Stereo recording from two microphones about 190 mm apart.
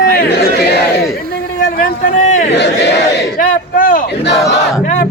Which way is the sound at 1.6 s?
40° left (ahead or behind).